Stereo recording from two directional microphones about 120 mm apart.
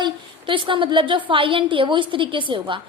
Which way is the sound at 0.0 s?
45° right (ahead or behind).